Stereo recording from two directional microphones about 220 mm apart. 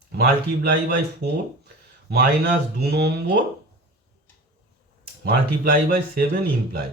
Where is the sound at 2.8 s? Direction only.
45° right (ahead or behind).